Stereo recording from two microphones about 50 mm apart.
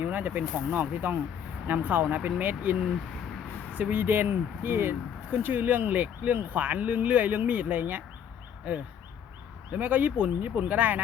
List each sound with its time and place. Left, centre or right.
0.0 s speech: right
3.8 s speech: right
5.3 s speech: right
9.7 s speech: right